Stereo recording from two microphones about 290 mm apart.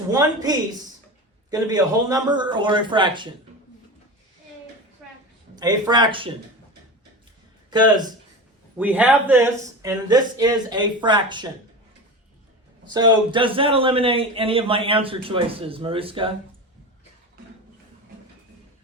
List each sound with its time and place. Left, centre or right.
0.1 s a man's voice: centre
5.5 s a man's voice: centre
7.7 s a man's voice: centre
12.9 s a man's voice: centre